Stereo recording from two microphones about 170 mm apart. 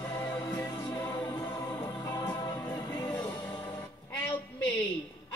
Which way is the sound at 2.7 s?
25° left (ahead or behind).